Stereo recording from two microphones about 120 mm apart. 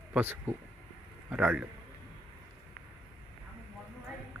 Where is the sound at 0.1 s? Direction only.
15° right (ahead or behind).